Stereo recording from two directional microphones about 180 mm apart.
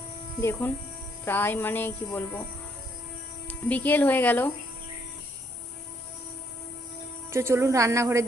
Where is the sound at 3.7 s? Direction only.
10° left (ahead or behind).